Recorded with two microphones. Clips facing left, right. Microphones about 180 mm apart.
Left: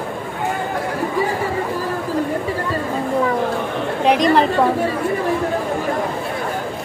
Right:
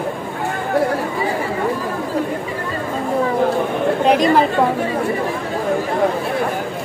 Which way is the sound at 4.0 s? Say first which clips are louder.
Even; centre (ahead or behind).